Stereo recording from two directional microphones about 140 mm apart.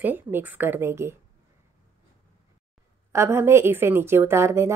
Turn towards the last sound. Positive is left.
turn(degrees=-20)  # may be behind; listen again after turning